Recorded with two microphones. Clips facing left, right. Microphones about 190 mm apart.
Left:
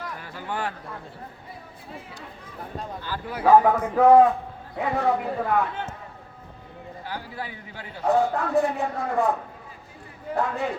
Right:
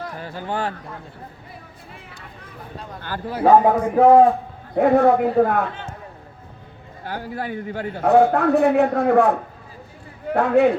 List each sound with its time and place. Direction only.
0.0 s speech: 30° right (ahead or behind)
3.2 s speech: 30° right (ahead or behind)
4.7 s a man's voice: 50° right (ahead or behind)
7.0 s a man's voice: 50° right (ahead or behind)